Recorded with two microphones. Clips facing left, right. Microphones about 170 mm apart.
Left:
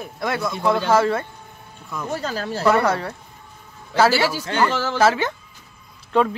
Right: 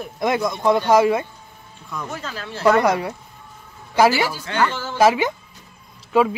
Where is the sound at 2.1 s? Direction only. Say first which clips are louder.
Left 6 dB; 40° left (ahead or behind).